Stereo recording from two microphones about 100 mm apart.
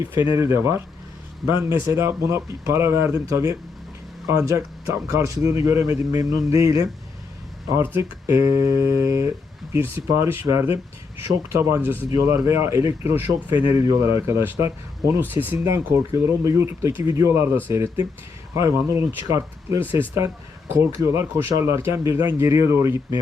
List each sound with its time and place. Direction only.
0.0 s speech: 20° right (ahead or behind)
11.4 s speech: 25° right (ahead or behind)
15.3 s speech: 20° right (ahead or behind)